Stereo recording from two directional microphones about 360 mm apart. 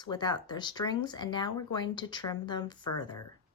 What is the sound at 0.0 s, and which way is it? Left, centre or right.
Speech, centre.